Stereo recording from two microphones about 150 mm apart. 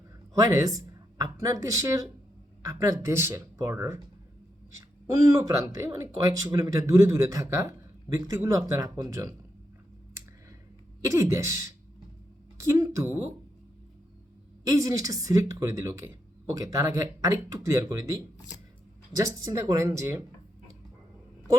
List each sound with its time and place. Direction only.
0.3 s speech: 20° right (ahead or behind)
5.1 s speech: 25° right (ahead or behind)
11.0 s a woman's voice: 20° right (ahead or behind)
14.7 s speech: 20° right (ahead or behind)